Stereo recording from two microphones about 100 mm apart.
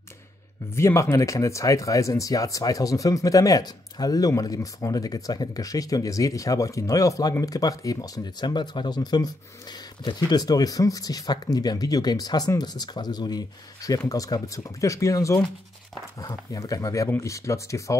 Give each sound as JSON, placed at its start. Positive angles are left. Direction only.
{"t": 0.7, "sound": "speech", "side_deg": 25}